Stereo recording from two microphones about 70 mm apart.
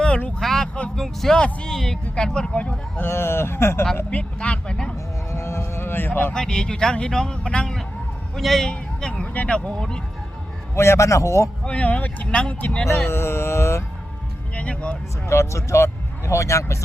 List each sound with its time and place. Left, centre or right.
0.3 s a sound: centre
0.9 s speech: centre
3.0 s speech: left
4.1 s a sound: centre
5.3 s a sound: left
6.3 s speech: centre
10.8 s speech: left
11.6 s speech: centre
13.1 s speech: left
14.5 s speech: centre
15.3 s speech: left